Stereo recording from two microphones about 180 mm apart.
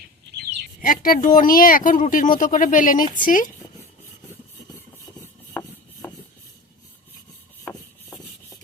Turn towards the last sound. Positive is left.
turn(degrees=10)  # may be behind; listen again after turning